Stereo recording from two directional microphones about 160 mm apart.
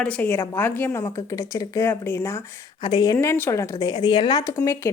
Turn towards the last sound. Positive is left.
turn(degrees=20)  # may be behind; listen again after turning